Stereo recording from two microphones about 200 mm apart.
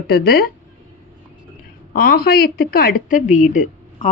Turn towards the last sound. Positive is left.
turn(degrees=40)  # may be behind; listen again after turning